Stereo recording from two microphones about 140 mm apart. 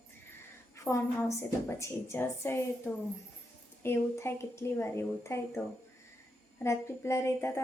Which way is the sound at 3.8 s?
20° left (ahead or behind).